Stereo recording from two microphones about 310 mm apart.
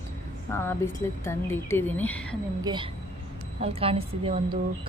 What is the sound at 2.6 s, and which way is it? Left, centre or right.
A woman's voice, centre.